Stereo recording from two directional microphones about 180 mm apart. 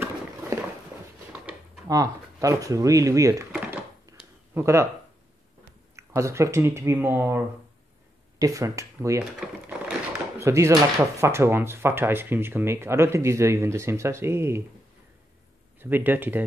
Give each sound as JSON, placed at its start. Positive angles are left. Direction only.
{"t": 0.0, "sound": "a sound", "side_deg": -15}
{"t": 1.9, "sound": "speech", "side_deg": -20}
{"t": 4.6, "sound": "speech", "side_deg": -15}
{"t": 9.4, "sound": "speech", "side_deg": -5}
{"t": 10.4, "sound": "speech", "side_deg": -15}
{"t": 15.8, "sound": "speech", "side_deg": -10}